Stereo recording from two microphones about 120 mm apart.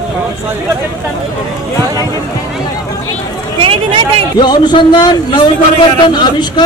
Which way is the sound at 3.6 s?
45° right (ahead or behind).